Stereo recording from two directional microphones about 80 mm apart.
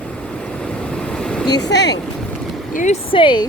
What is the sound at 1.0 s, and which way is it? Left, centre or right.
Vehicle, centre.